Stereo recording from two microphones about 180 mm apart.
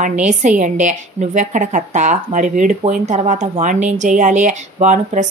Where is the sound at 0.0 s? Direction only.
40° right (ahead or behind).